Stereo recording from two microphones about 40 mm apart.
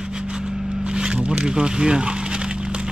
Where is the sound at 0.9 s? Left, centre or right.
Right.